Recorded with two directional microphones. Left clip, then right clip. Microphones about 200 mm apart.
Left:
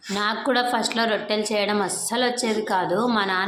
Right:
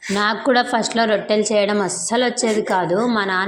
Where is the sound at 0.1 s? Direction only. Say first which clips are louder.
Right 5 dB; 25° right (ahead or behind).